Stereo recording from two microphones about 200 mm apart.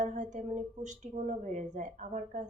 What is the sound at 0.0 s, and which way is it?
Speech, 40° right (ahead or behind).